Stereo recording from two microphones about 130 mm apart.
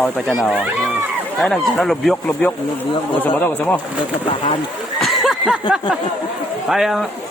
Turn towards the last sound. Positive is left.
turn(degrees=0)  # may be behind; listen again after turning